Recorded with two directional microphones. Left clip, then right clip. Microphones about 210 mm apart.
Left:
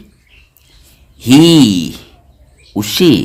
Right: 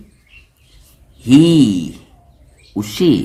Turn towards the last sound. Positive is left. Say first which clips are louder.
# left 4 dB
turn(degrees=40)  # may be behind; listen again after turning